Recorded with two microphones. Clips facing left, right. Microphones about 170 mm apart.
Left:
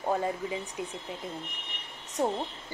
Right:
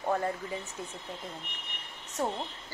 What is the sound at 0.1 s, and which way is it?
Speech, 15° left (ahead or behind).